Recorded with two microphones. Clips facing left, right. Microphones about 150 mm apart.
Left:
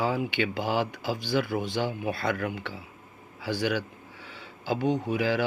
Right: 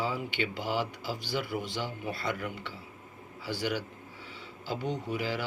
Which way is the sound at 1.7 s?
55° left (ahead or behind).